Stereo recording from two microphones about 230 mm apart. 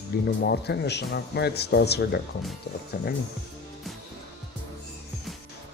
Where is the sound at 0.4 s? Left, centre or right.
Left.